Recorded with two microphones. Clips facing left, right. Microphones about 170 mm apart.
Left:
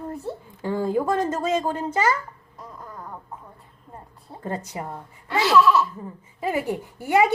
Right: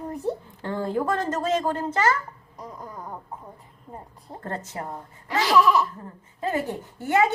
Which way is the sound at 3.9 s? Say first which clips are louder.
Right 3 dB; 20° right (ahead or behind).